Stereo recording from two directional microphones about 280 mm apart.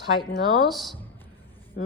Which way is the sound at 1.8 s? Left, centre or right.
Left.